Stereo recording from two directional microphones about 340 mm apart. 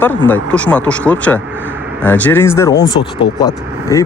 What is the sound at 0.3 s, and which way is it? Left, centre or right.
Speech, centre.